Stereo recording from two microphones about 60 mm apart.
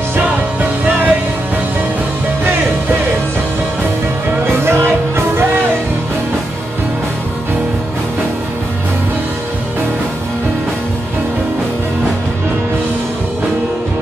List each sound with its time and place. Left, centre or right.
0.6 s music: right
4.6 s music: right